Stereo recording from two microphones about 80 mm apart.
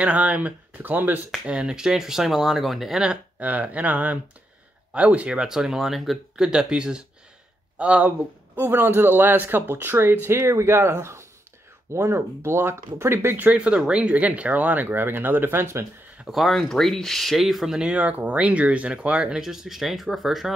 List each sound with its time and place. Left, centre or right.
0.0 s a man's voice: centre
1.4 s a man's voice: centre
13.6 s a man's voice: centre; by 15.9 s right
16.3 s speech: centre
17.9 s speech: centre